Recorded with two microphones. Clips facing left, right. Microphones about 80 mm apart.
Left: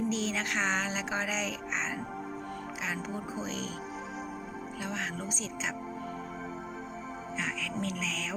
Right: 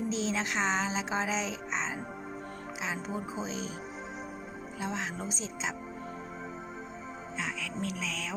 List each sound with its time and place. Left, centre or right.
0.1 s music: right
4.8 s music: right
7.3 s music: centre